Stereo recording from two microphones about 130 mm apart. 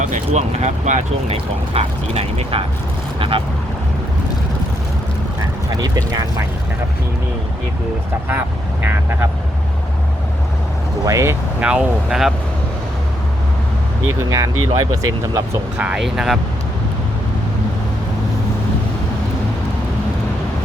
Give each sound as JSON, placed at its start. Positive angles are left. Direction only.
{"t": 0.0, "sound": "speech", "side_deg": -65}
{"t": 1.7, "sound": "speech", "side_deg": -50}
{"t": 5.7, "sound": "speech", "side_deg": -30}
{"t": 8.8, "sound": "speech", "side_deg": -15}
{"t": 11.0, "sound": "speech", "side_deg": -20}
{"t": 11.6, "sound": "speech", "side_deg": -10}
{"t": 14.1, "sound": "speech", "side_deg": -20}
{"t": 15.8, "sound": "speech", "side_deg": -5}